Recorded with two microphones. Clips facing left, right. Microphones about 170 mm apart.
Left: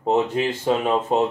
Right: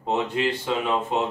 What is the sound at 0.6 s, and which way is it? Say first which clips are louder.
Speech: left 4 dB; 40° left (ahead or behind).